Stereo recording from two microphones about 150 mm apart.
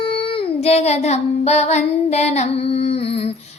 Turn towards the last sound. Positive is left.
turn(degrees=40)  # may be behind; listen again after turning